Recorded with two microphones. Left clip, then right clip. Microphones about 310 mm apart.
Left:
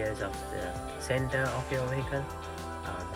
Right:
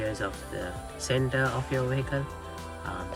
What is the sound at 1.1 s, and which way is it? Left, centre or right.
Speech, centre.